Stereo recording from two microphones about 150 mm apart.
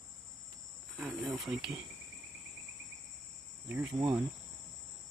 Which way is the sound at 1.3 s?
Centre (ahead or behind).